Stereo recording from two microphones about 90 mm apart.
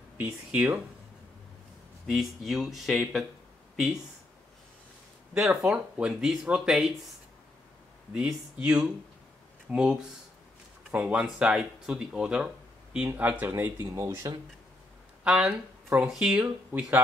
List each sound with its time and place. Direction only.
2.0 s speech: 5° right (ahead or behind)
5.5 s speech: 10° right (ahead or behind)
8.1 s speech: 10° right (ahead or behind)
10.9 s speech: 20° right (ahead or behind)
15.2 s speech: 5° right (ahead or behind)